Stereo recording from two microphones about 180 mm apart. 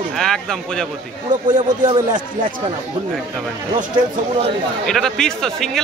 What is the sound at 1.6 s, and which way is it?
Speech, 25° right (ahead or behind).